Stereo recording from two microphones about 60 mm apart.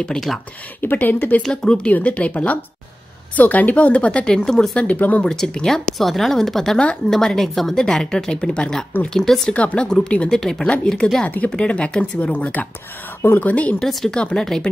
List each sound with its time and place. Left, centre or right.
0.2 s a woman's voice: centre
0.7 s speech: left
1.5 s a woman's voice: centre
4.8 s speech: left
5.2 s a woman's voice: centre
9.5 s a woman's voice: centre
10.3 s a woman's voice: centre
11.2 s a woman's voice: left